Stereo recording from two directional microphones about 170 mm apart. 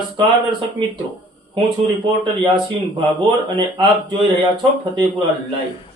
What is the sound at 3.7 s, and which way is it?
Speech, 25° right (ahead or behind).